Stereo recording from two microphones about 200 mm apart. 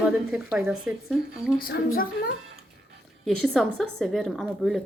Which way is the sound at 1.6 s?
45° left (ahead or behind).